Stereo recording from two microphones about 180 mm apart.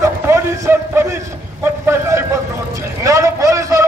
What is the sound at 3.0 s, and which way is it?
Vehicle, 15° right (ahead or behind).